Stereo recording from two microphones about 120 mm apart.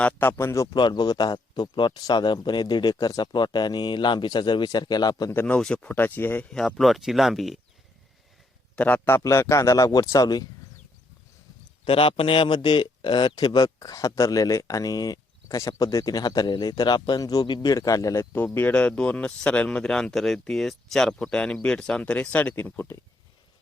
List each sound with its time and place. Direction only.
0.0 s speech: 15° left (ahead or behind)
0.7 s a man's voice: 40° left (ahead or behind)
5.3 s speech: 20° left (ahead or behind)
5.5 s speech: 5° left (ahead or behind)
6.5 s speech: 5° left (ahead or behind)
8.7 s speech: 15° left (ahead or behind); by 10.4 s 30° left (ahead or behind)
11.9 s speech: 50° left (ahead or behind); by 23.0 s 15° left (ahead or behind)